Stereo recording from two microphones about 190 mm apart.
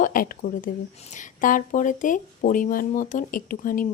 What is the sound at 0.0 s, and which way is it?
Speech, 45° left (ahead or behind).